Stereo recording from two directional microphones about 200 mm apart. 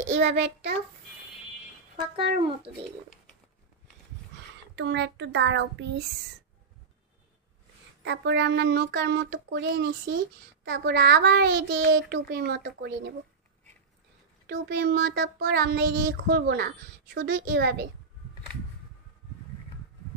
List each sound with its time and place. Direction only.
0.1 s speech: 60° right (ahead or behind)
4.7 s speech: 60° right (ahead or behind)
8.0 s speech: 60° right (ahead or behind)
14.5 s speech: 60° right (ahead or behind)